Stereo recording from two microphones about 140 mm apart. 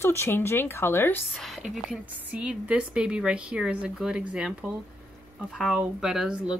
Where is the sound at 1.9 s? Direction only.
10° right (ahead or behind).